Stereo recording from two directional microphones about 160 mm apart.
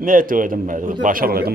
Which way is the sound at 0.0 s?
60° right (ahead or behind).